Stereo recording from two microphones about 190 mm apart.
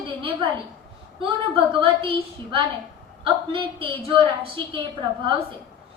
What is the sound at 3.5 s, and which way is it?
A woman's voice, 25° right (ahead or behind).